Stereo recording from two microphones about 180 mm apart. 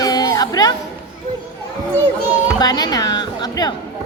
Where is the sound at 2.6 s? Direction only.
20° left (ahead or behind).